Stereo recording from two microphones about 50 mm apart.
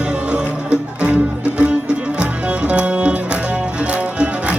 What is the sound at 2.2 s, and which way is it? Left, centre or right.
Music, right.